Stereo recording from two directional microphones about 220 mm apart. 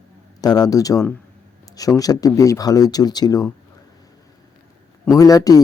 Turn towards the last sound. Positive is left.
turn(degrees=15)  # may be behind; listen again after turning